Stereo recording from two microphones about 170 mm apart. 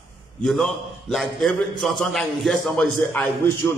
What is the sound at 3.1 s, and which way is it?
Speech, 10° left (ahead or behind).